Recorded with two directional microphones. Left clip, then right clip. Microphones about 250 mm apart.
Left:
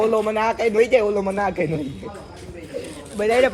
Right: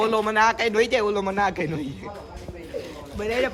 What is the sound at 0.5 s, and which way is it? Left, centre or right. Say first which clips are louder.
Speech: left 3 dB; right.